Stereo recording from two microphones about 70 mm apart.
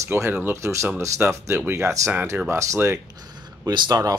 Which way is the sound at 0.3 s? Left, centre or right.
Right.